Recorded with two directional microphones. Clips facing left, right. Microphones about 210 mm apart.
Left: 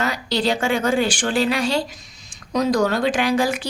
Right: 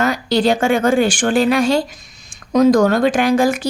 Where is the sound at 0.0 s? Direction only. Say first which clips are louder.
Right 6 dB; 50° right (ahead or behind).